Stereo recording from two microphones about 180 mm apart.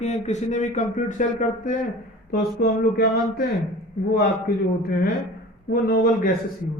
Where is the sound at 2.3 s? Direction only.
55° left (ahead or behind).